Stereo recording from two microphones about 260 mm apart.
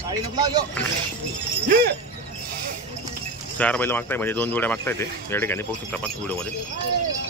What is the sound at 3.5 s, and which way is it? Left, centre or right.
Speech, centre.